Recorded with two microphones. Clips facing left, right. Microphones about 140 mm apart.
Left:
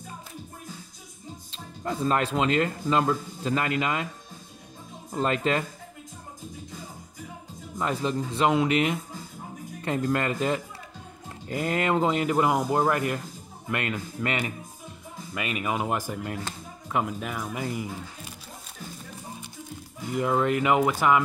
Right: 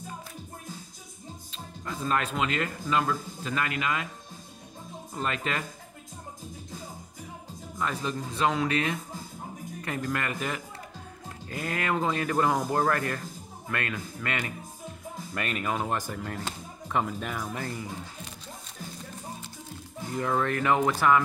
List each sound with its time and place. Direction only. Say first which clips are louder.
1.5 s speech: left 6 dB; 30° left (ahead or behind)
5.1 s speech: left 6 dB; 30° left (ahead or behind)
7.8 s speech: left 4 dB; 25° left (ahead or behind)
15.3 s speech: left 2 dB; 5° left (ahead or behind)
20.1 s speech: left 4 dB; 15° left (ahead or behind)